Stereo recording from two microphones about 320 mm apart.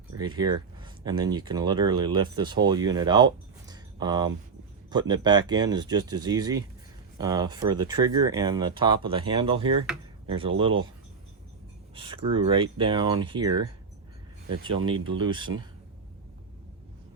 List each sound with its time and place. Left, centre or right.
0.2 s speech: centre
11.9 s speech: centre
14.8 s speech: centre